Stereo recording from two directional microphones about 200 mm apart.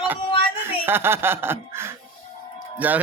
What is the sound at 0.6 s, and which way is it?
Speech, 10° right (ahead or behind).